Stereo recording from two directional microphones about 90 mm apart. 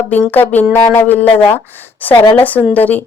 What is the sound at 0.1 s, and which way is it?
Speech, 20° left (ahead or behind).